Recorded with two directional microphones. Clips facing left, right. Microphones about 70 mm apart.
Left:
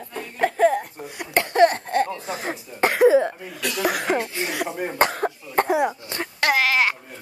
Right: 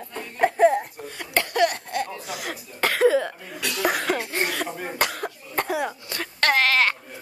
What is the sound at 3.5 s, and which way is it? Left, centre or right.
Speech, centre.